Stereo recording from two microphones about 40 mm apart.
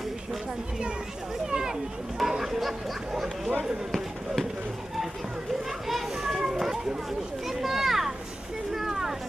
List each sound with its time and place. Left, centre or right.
1.5 s speech: centre
5.9 s children playing: centre
7.4 s a child's voice: centre
8.7 s a sound: centre